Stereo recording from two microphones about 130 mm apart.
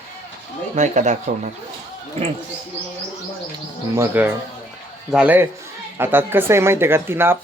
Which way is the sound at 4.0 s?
15° right (ahead or behind).